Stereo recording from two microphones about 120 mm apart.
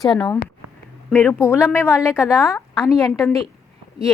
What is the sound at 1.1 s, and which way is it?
A woman's voice, 20° left (ahead or behind).